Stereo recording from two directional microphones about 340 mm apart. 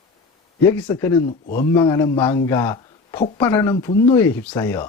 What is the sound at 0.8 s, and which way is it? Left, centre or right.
Speech, centre.